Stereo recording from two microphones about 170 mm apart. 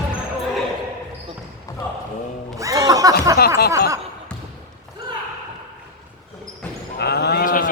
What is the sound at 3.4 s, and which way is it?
Snicker, 65° left (ahead or behind).